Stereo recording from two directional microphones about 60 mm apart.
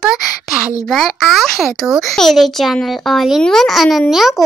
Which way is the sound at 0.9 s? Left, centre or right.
Centre.